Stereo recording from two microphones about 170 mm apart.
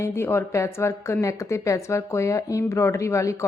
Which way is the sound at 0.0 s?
15° left (ahead or behind).